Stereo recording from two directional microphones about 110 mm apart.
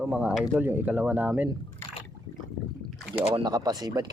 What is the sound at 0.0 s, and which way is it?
Speech, 15° right (ahead or behind).